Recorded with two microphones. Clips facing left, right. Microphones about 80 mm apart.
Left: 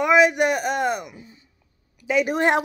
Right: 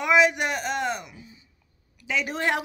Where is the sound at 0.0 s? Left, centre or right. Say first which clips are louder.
Left 4 dB; centre.